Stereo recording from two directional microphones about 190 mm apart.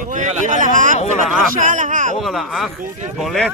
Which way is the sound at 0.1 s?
40° right (ahead or behind).